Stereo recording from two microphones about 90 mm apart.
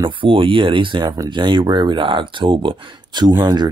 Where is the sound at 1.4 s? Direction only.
65° right (ahead or behind).